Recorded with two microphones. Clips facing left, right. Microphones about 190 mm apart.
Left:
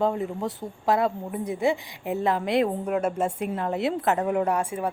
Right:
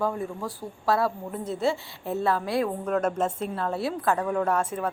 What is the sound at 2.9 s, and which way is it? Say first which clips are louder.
A woman's voice: even; 10° left (ahead or behind).